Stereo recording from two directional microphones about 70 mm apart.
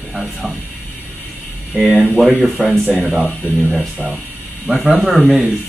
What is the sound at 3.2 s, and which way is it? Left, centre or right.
Speech, left.